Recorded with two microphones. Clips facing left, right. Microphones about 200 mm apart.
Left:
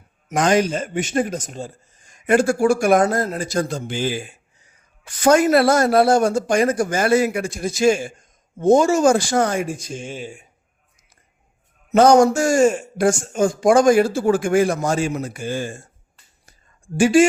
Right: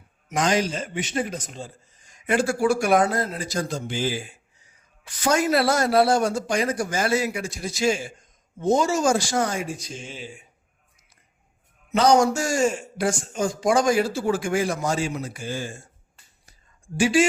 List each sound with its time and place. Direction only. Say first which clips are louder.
0.3 s a man's voice: left 5 dB; 55° left (ahead or behind)
11.9 s a man's voice: left 6 dB; 50° left (ahead or behind)
17.0 s a man's voice: left 6 dB; 50° left (ahead or behind)